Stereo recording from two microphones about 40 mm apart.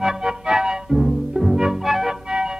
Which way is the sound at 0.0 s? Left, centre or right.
Centre.